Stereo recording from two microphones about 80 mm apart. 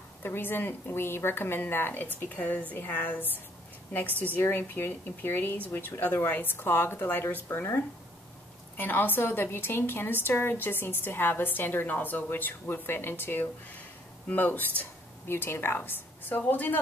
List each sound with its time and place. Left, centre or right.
0.2 s a woman's voice: left